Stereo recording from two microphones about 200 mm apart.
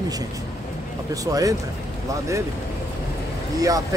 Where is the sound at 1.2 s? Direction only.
20° right (ahead or behind).